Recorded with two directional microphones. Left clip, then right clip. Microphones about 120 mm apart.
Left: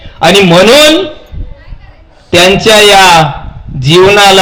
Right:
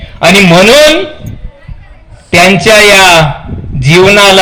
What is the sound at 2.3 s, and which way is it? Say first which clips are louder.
Speech: even; 50° left (ahead or behind).